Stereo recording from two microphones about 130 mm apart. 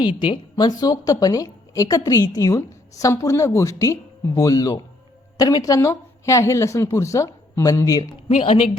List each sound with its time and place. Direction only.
0.0 s a woman's voice: 40° left (ahead or behind)
8.0 s speech: 50° left (ahead or behind)